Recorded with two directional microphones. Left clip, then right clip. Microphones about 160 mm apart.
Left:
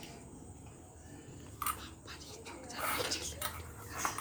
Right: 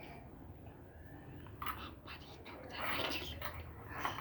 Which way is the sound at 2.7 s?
15° right (ahead or behind).